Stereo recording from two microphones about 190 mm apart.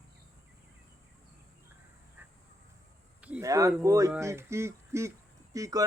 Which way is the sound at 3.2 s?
10° right (ahead or behind).